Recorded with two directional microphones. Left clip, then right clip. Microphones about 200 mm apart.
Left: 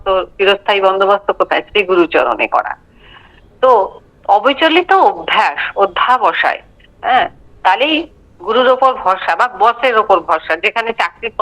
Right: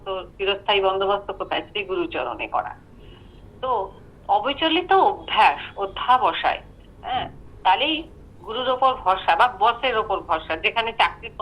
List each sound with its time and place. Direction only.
0.0 s a man's voice: 60° left (ahead or behind)